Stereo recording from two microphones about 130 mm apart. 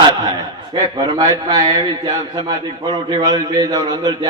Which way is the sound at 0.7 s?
35° right (ahead or behind).